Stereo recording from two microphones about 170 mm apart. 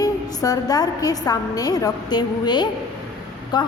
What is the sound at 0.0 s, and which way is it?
A woman's voice, 20° left (ahead or behind).